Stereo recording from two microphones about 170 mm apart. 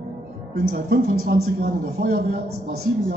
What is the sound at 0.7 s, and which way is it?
Speech, 60° right (ahead or behind).